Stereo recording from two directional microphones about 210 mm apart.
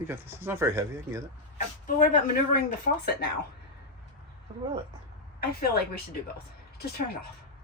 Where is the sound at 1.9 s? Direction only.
40° left (ahead or behind).